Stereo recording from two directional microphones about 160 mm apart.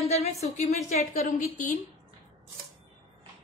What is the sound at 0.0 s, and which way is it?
A woman's voice, 40° left (ahead or behind).